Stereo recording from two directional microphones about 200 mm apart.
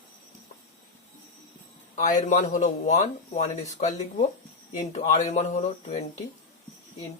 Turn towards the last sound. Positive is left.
turn(degrees=35)  # may be behind; listen again after turning